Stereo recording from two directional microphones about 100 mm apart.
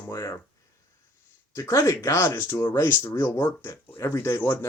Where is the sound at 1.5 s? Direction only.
30° left (ahead or behind).